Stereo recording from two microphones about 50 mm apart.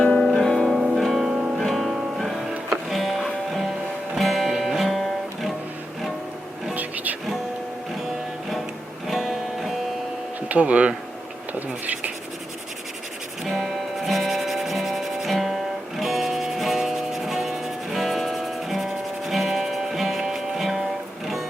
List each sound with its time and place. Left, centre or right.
0.0 s music: centre
1.3 s music: centre
1.5 s music: centre
6.7 s music: right
9.0 s music: centre
10.5 s speech: right
13.4 s music: centre